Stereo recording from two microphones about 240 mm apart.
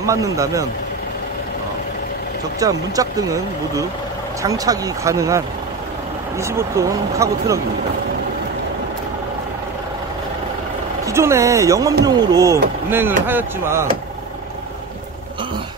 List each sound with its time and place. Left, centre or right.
0.0 s speech: centre
2.6 s speech: centre
6.4 s speech: centre
11.1 s speech: centre